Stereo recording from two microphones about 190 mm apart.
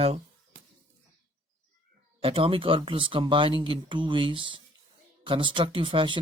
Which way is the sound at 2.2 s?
30° right (ahead or behind).